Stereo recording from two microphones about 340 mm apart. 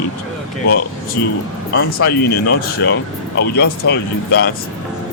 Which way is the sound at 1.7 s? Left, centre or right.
Left.